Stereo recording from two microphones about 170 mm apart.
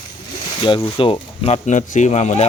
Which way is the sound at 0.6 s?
30° left (ahead or behind).